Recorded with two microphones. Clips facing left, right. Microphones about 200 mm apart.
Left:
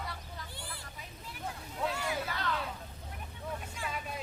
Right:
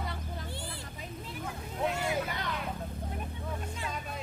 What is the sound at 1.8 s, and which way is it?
Vehicle, 20° right (ahead or behind).